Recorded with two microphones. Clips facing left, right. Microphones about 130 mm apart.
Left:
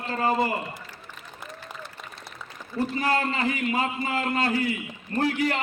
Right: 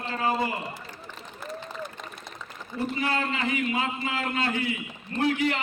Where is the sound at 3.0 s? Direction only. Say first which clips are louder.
Left 3 dB; 40° left (ahead or behind).